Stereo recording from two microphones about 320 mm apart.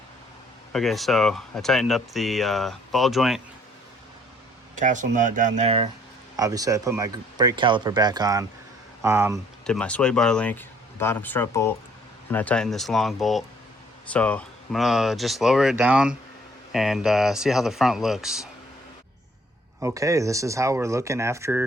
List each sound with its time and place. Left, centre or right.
0.7 s speech: centre
4.7 s speech: right; by 9.4 s centre
9.6 s speech: centre
19.8 s speech: centre